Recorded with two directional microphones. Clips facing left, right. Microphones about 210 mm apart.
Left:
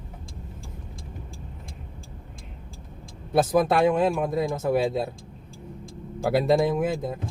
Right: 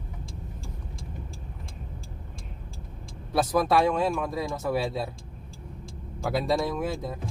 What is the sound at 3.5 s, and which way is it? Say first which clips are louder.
Speech: left 2 dB; 50° left (ahead or behind).